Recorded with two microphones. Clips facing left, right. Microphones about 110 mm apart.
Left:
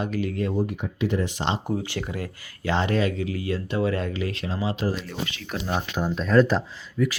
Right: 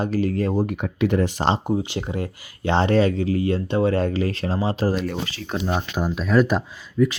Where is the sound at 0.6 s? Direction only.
60° right (ahead or behind).